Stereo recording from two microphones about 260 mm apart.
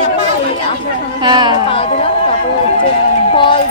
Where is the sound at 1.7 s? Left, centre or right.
Left.